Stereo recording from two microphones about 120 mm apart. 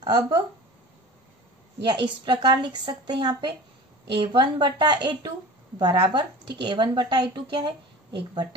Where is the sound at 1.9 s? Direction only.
40° right (ahead or behind).